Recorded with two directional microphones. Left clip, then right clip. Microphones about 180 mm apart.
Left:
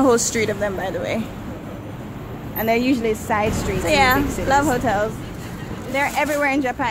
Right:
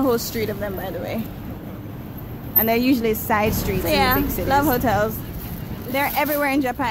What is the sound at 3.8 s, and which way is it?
Speech, 5° right (ahead or behind).